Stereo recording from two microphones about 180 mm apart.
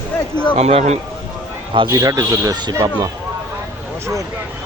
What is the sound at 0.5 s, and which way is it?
Speech, 35° right (ahead or behind).